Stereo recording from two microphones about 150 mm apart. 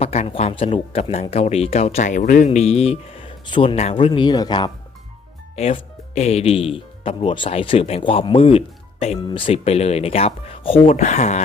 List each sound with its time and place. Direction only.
0.0 s speech: 45° left (ahead or behind); by 4.7 s 30° left (ahead or behind)
5.5 s speech: 40° left (ahead or behind)
10.8 s speech: 55° left (ahead or behind)